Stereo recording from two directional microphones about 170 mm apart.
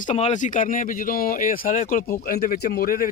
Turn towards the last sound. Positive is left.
turn(degrees=55)  # may be behind; listen again after turning